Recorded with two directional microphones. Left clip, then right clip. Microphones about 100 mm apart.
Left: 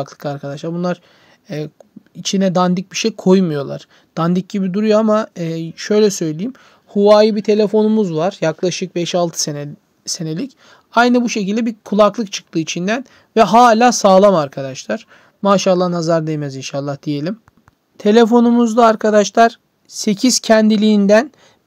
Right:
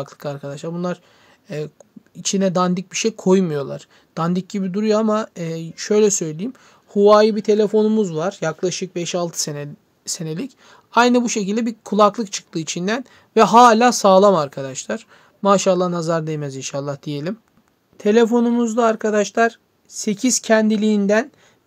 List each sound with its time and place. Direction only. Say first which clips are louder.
0.0 s speech: left 4 dB; 35° left (ahead or behind)
10.0 s speech: left 4 dB; 25° left (ahead or behind)
17.9 s speech: left 4 dB; 55° left (ahead or behind)